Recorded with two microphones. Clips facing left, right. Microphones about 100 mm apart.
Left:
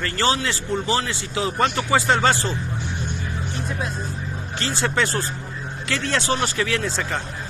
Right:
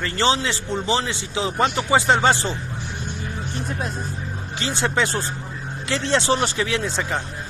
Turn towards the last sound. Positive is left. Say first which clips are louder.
# even
turn(degrees=-15)  # may be behind; listen again after turning